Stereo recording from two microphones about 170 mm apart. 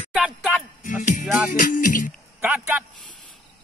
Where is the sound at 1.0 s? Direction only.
45° left (ahead or behind).